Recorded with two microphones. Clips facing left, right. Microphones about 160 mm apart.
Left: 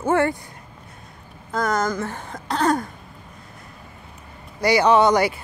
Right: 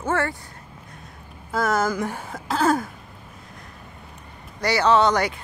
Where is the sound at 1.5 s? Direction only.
5° right (ahead or behind).